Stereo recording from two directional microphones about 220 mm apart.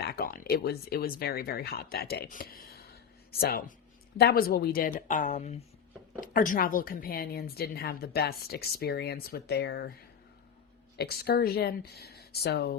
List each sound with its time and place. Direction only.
0.0 s speech: 45° left (ahead or behind)
10.9 s speech: 45° left (ahead or behind)